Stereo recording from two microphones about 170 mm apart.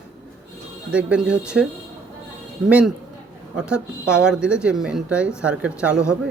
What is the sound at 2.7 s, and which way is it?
Speech, 5° right (ahead or behind).